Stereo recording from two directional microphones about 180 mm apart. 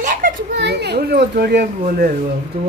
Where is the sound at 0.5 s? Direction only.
70° right (ahead or behind).